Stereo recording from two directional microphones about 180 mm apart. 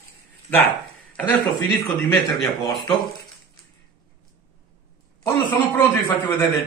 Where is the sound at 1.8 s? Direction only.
Centre (ahead or behind).